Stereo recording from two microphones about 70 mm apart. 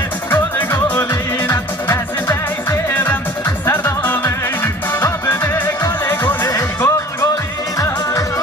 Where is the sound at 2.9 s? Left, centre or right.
Left.